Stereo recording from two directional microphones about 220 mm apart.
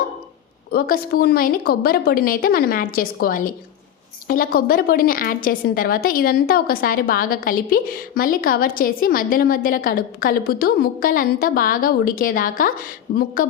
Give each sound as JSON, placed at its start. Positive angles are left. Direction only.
{"t": 0.7, "sound": "a woman's voice", "side_deg": 45}